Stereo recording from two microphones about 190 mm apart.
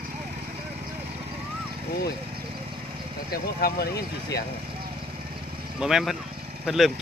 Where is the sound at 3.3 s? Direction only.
55° left (ahead or behind).